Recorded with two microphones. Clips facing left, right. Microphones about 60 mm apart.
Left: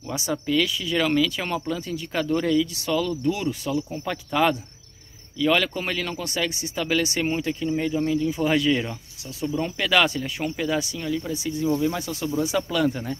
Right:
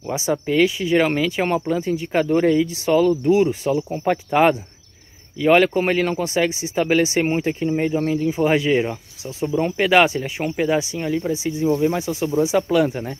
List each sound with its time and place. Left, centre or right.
0.0 s speech: right
6.2 s speech: right